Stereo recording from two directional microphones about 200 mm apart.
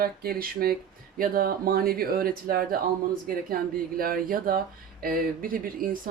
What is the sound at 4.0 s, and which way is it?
Speech, 45° right (ahead or behind).